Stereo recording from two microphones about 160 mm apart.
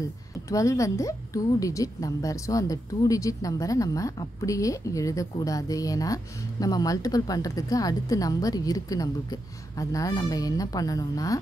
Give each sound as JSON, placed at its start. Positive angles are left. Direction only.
{"t": 0.5, "sound": "speech", "side_deg": 20}